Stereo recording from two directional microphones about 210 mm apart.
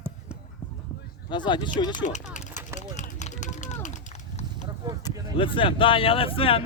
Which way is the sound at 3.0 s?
35° left (ahead or behind).